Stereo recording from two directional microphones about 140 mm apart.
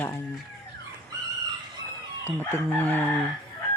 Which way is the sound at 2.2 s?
15° left (ahead or behind).